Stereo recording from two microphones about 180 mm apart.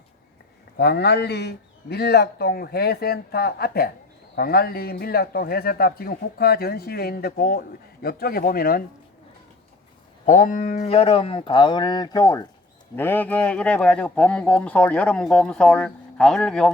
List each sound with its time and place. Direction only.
0.8 s a man's voice: 65° left (ahead or behind)
10.2 s speech: 45° left (ahead or behind); by 16.7 s 5° left (ahead or behind)